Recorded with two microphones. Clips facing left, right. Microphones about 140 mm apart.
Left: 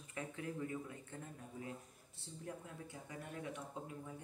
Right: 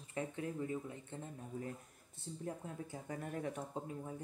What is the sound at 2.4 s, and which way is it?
Speech, 30° right (ahead or behind).